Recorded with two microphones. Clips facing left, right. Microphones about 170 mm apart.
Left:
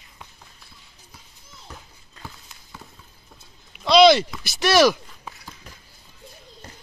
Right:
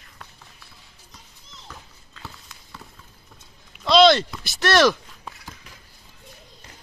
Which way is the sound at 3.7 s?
Centre (ahead or behind).